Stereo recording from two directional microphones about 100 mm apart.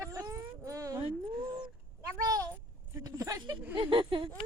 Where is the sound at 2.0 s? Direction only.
35° right (ahead or behind).